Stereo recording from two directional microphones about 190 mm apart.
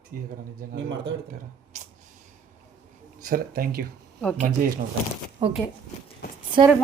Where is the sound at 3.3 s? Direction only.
50° right (ahead or behind).